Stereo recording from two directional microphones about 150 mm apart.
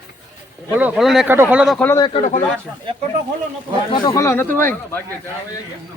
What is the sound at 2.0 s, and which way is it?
Speech, 30° left (ahead or behind).